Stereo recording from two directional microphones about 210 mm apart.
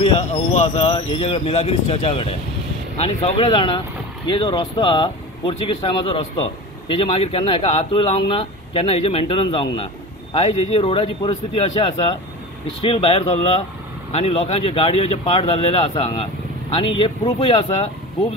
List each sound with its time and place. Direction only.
0.0 s speech: 30° left (ahead or behind)